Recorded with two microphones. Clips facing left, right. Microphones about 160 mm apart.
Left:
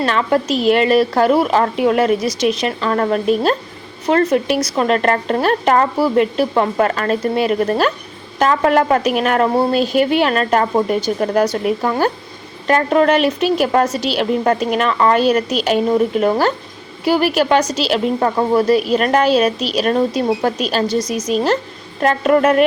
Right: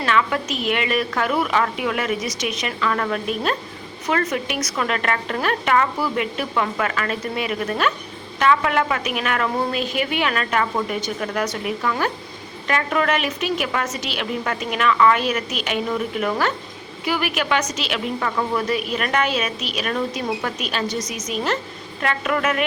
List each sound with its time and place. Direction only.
0.0 s a woman's voice: 35° left (ahead or behind)